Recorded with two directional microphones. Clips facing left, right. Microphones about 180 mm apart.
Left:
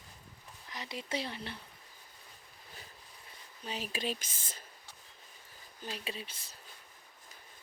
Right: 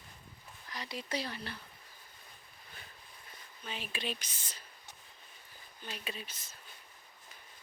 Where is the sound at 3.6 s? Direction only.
40° left (ahead or behind).